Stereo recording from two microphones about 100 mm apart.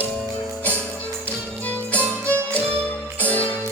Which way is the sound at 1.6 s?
15° left (ahead or behind).